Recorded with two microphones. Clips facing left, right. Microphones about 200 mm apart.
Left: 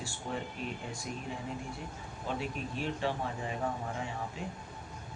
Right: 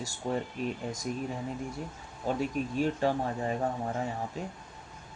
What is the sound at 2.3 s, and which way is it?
Speech, 45° right (ahead or behind).